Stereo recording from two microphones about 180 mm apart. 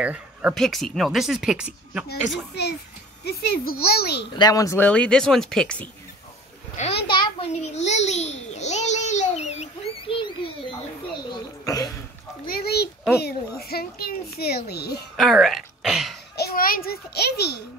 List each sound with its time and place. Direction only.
0.0 s speech: 10° right (ahead or behind)
2.5 s a child's voice: 65° left (ahead or behind)
4.3 s speech: 20° left (ahead or behind); by 5.9 s 5° left (ahead or behind)
7.1 s a sound: 25° left (ahead or behind)
11.6 s a sound: 20° left (ahead or behind)
12.4 s a sound: 60° left (ahead or behind)
13.2 s a child's voice: 60° left (ahead or behind)
15.1 s speech: centre (ahead or behind)
16.3 s a child's voice: 55° left (ahead or behind)